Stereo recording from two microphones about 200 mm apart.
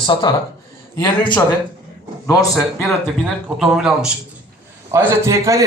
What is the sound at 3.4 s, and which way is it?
Speech, centre (ahead or behind).